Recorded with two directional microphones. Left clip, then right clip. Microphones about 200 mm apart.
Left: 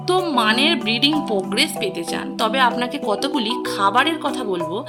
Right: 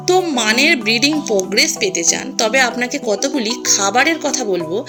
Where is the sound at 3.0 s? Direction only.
Centre (ahead or behind).